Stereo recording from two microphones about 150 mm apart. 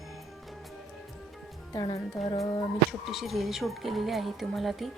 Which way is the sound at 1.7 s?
25° left (ahead or behind).